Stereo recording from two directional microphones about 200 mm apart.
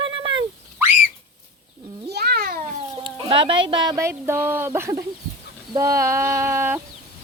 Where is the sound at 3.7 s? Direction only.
20° right (ahead or behind).